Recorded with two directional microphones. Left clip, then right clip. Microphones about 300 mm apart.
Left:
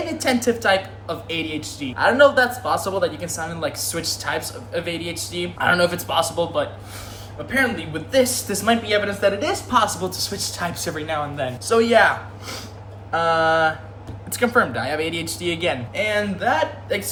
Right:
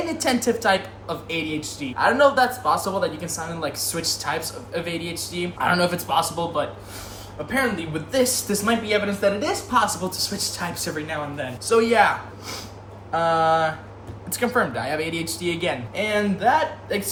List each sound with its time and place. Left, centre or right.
0.4 s a man's voice: centre